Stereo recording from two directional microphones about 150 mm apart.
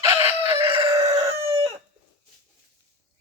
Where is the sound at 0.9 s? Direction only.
25° right (ahead or behind).